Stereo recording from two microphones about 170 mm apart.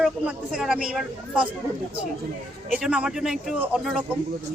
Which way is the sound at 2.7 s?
5° right (ahead or behind).